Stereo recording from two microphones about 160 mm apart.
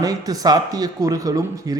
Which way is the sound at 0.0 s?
25° right (ahead or behind).